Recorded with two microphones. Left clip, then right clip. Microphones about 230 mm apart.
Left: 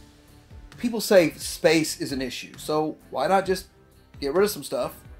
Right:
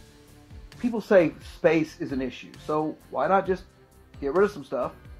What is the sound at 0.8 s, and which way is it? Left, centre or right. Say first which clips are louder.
Speech: left 1 dB; left.